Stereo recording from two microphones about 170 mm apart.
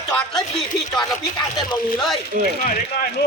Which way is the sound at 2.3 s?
55° right (ahead or behind).